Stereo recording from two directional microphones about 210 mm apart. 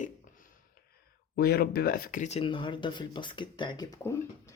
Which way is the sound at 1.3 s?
50° left (ahead or behind).